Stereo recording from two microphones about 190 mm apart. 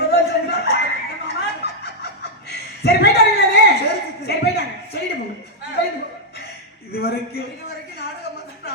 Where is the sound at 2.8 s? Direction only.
60° left (ahead or behind).